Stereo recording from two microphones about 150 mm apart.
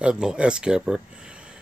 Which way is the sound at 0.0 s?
5° right (ahead or behind).